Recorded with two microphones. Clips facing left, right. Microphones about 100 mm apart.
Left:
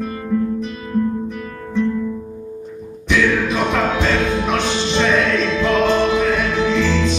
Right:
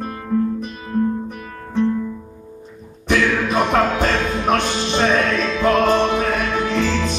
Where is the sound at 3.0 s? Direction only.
45° right (ahead or behind).